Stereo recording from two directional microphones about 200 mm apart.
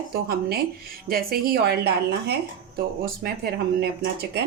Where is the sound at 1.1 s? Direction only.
50° right (ahead or behind).